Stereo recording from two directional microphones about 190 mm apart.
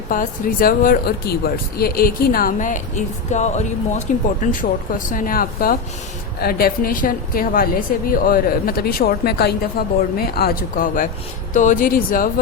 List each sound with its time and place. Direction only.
0.1 s a woman's voice: 45° left (ahead or behind)